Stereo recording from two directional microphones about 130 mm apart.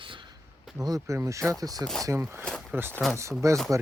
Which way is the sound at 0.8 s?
25° right (ahead or behind).